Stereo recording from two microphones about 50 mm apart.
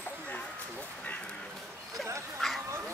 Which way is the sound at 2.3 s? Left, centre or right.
Centre.